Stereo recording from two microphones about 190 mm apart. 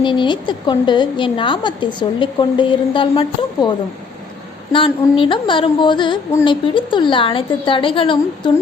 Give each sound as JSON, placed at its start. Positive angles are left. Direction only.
{"t": 0.0, "sound": "a woman's voice", "side_deg": 25}